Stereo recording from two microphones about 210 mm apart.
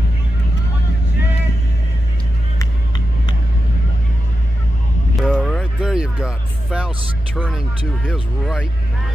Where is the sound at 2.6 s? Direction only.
20° left (ahead or behind).